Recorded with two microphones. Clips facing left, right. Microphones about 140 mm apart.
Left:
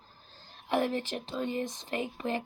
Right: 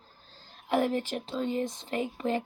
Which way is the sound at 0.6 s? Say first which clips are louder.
Right 2 dB; 15° right (ahead or behind).